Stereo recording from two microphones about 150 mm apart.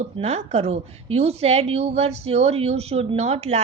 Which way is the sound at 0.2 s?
45° right (ahead or behind).